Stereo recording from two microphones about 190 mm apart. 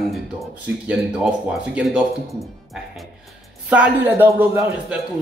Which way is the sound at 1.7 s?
5° right (ahead or behind).